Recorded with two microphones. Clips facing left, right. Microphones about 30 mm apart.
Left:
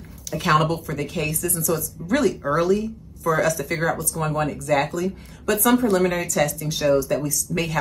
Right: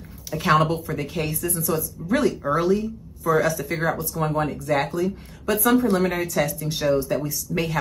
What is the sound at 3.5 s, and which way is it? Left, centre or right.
Speech, left.